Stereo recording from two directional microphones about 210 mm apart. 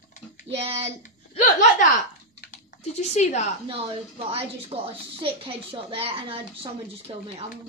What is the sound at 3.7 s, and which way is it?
A woman's voice, 25° right (ahead or behind).